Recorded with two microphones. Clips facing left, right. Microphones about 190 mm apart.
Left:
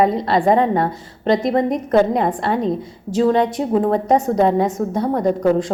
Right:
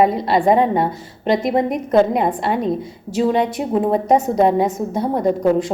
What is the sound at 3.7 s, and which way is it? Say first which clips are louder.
A woman's voice: right 1 dB; 15° right (ahead or behind).